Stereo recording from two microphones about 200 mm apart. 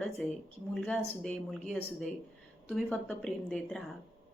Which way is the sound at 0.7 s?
Centre (ahead or behind).